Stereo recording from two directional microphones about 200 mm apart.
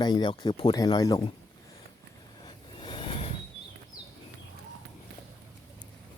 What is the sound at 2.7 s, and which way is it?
Vehicle, 25° left (ahead or behind).